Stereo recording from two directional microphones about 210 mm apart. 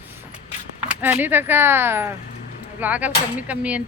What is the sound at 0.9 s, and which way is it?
Speech, 10° right (ahead or behind).